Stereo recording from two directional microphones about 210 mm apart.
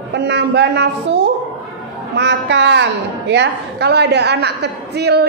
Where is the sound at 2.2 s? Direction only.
55° right (ahead or behind).